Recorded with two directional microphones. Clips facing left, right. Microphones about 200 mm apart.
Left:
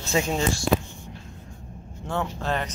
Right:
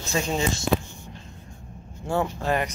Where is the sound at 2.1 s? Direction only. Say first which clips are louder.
Right 3 dB; 10° right (ahead or behind).